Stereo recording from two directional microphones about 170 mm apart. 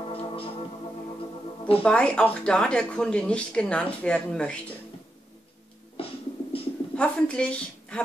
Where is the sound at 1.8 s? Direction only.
5° left (ahead or behind).